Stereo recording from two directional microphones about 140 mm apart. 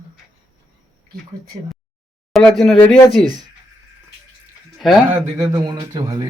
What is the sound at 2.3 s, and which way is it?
Speech, centre (ahead or behind).